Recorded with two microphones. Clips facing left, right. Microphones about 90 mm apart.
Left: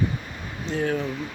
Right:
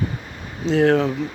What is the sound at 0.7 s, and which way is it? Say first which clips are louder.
Speech: right 9 dB; 90° right.